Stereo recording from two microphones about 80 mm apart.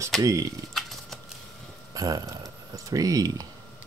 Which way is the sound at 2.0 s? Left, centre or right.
Right.